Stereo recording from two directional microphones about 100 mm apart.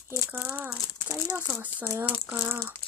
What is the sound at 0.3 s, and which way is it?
Speech, 15° right (ahead or behind).